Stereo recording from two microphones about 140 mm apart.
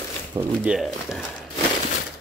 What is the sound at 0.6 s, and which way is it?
Speech, centre (ahead or behind).